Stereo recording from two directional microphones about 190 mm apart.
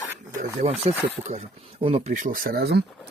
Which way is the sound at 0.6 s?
30° right (ahead or behind).